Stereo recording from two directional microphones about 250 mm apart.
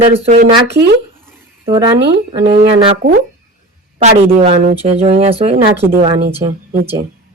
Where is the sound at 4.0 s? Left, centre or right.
Right.